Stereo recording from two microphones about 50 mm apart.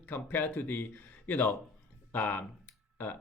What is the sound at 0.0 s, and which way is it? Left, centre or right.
Speech, left.